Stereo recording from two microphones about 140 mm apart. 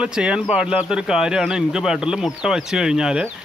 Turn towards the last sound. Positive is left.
turn(degrees=-5)  # may be behind; listen again after turning